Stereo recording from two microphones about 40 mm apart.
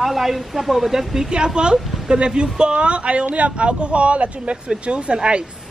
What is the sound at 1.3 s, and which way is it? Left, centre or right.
A woman's voice, right.